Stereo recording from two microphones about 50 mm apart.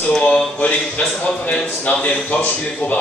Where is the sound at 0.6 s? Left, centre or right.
Left.